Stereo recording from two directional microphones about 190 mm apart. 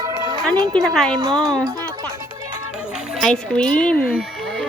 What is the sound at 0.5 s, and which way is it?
Speech, 20° right (ahead or behind).